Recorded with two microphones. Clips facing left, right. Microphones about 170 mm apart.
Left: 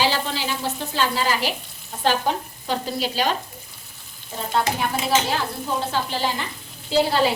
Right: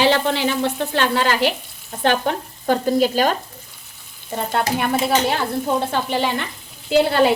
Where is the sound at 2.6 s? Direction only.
50° right (ahead or behind).